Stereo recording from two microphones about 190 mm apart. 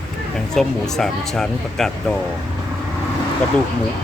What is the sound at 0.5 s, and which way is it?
Speech, centre (ahead or behind).